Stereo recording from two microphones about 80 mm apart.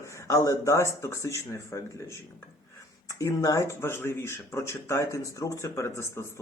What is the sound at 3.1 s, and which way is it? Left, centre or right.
Speech, left.